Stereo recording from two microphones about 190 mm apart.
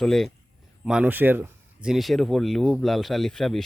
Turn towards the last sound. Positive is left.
turn(degrees=0)  # may be behind; listen again after turning